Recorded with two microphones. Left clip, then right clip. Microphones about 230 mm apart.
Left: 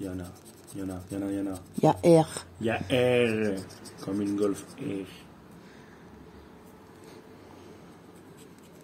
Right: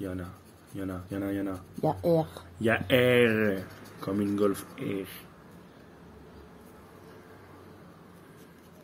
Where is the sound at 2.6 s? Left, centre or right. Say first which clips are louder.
Right 2 dB; centre.